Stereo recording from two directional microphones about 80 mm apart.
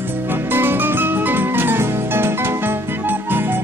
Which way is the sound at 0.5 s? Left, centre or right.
Right.